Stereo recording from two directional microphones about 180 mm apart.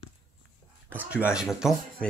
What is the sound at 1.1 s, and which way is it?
Speech, 5° right (ahead or behind).